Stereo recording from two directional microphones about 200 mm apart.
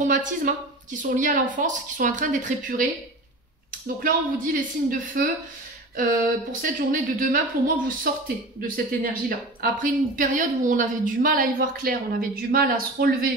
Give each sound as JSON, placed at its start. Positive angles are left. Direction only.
{"t": 0.0, "sound": "a woman's voice", "side_deg": -40}